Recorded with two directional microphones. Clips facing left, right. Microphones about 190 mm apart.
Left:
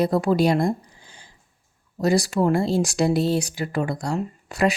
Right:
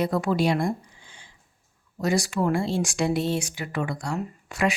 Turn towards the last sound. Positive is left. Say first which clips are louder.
# left 4 dB
turn(degrees=35)  # may be behind; listen again after turning